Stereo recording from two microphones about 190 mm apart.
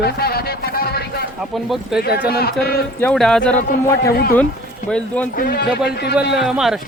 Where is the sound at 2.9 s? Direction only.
5° left (ahead or behind).